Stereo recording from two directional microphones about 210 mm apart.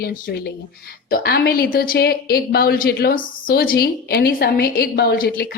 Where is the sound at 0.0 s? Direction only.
50° left (ahead or behind).